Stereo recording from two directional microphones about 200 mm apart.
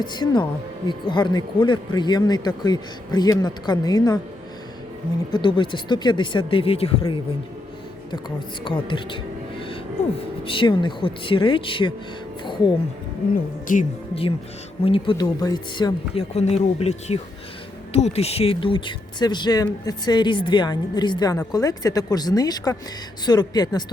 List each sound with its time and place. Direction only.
0.0 s speech: 20° left (ahead or behind)
5.3 s speech: 25° left (ahead or behind)
8.6 s speech: 25° left (ahead or behind)
13.7 s speech: 40° left (ahead or behind)
14.8 s speech: 25° left (ahead or behind)